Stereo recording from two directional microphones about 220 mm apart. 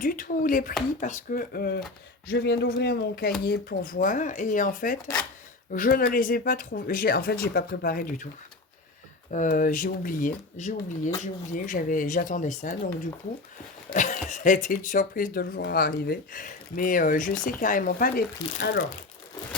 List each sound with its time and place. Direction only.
0.0 s speech: 40° left (ahead or behind)
9.3 s speech: 35° left (ahead or behind)
13.9 s speech: 35° left (ahead or behind)